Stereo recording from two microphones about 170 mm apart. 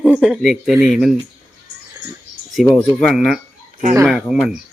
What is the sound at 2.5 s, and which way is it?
Speech, centre (ahead or behind).